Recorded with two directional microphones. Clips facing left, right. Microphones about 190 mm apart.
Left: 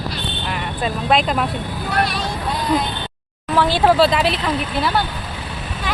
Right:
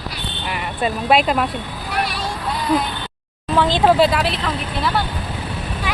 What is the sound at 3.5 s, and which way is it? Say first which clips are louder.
Speech: even; 15° right (ahead or behind).